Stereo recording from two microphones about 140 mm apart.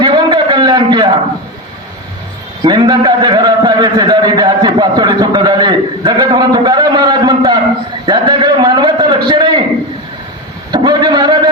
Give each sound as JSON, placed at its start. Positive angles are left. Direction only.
{"t": 0.0, "sound": "a sound", "side_deg": -35}
{"t": 2.6, "sound": "a man's voice", "side_deg": -30}
{"t": 10.7, "sound": "a man's voice", "side_deg": -30}